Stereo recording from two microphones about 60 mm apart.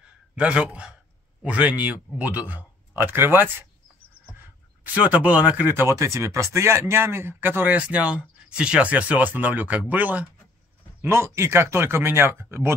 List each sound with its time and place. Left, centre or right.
0.4 s speech: centre; by 3.5 s right
4.9 s speech: right
5.8 s speech: right
11.1 s speech: right